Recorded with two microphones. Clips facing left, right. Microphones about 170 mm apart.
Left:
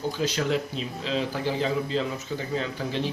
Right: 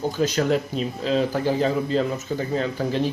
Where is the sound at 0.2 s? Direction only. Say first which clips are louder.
Right 6 dB; 45° right (ahead or behind).